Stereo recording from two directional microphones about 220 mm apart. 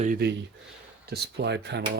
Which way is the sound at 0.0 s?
40° right (ahead or behind).